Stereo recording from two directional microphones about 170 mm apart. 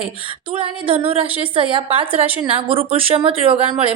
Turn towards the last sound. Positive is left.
turn(degrees=-35)  # may be behind; listen again after turning